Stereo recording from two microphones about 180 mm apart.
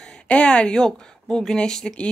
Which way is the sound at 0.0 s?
5° left (ahead or behind).